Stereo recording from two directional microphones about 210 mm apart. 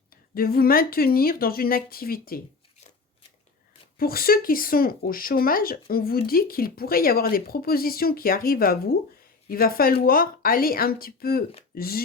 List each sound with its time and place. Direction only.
0.3 s speech: 45° left (ahead or behind)
3.9 s speech: 45° left (ahead or behind)